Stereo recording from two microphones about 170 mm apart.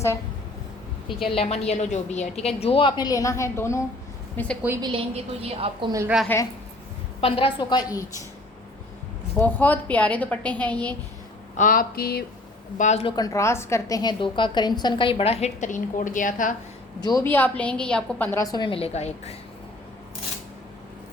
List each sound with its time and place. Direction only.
1.2 s a woman's voice: 35° left (ahead or behind); by 4.5 s 10° left (ahead or behind)
4.8 s a woman's voice: 30° right (ahead or behind)
6.2 s a woman's voice: 15° left (ahead or behind)
7.2 s a woman's voice: 30° left (ahead or behind)
9.4 s a woman's voice: 10° left (ahead or behind)
11.5 s a sound: 55° left (ahead or behind)
12.7 s speech: 45° left (ahead or behind)
13.1 s a woman's voice: 20° left (ahead or behind); by 16.6 s 50° left (ahead or behind)
17.1 s a woman's voice: 15° left (ahead or behind); by 19.4 s 40° left (ahead or behind)